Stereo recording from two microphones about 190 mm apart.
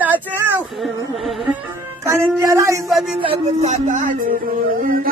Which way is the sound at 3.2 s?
30° right (ahead or behind).